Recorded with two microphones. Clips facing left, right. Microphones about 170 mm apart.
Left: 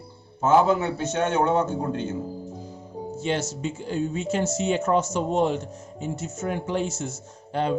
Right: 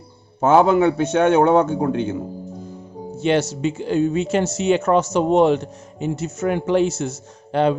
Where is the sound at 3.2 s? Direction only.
70° right (ahead or behind).